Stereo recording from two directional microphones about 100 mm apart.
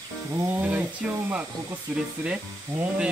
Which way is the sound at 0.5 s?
15° right (ahead or behind).